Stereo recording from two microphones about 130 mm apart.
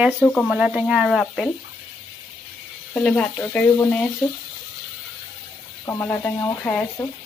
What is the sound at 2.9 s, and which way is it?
Speech, 10° left (ahead or behind).